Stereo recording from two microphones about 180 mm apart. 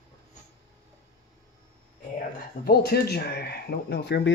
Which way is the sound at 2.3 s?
60° left (ahead or behind).